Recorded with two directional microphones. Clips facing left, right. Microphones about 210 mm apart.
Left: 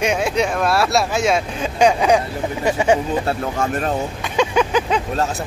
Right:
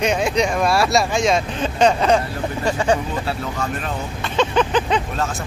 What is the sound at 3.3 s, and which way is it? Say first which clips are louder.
Speech: left 4 dB; 50° left (ahead or behind).